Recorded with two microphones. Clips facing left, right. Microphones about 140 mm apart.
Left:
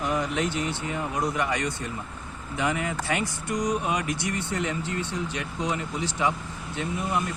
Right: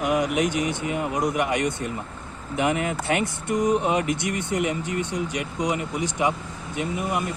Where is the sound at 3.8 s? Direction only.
25° right (ahead or behind).